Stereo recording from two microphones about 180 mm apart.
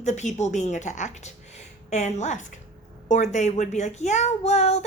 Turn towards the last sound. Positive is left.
turn(degrees=35)  # may be behind; listen again after turning